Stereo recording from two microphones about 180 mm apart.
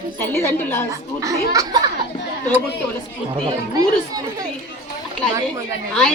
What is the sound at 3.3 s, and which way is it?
Speech, 20° right (ahead or behind).